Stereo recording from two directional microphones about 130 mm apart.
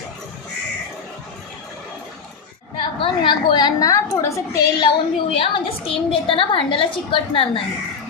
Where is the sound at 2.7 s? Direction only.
40° left (ahead or behind).